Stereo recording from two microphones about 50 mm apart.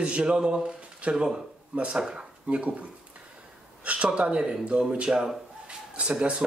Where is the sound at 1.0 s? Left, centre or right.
Right.